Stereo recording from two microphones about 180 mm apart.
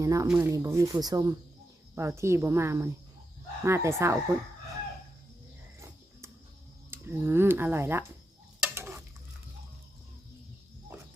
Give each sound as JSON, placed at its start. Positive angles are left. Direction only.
{"t": 0.0, "sound": "speech", "side_deg": -20}
{"t": 6.9, "sound": "speech", "side_deg": -15}
{"t": 8.6, "sound": "stir", "side_deg": -15}